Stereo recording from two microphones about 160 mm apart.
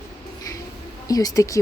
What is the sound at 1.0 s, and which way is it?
Speech, 20° left (ahead or behind).